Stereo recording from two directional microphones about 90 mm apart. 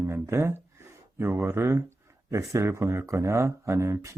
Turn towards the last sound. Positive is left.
turn(degrees=-35)  # may be behind; listen again after turning